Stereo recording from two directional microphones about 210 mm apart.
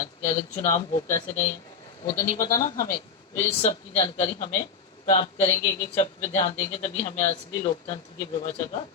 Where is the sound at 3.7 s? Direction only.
25° left (ahead or behind).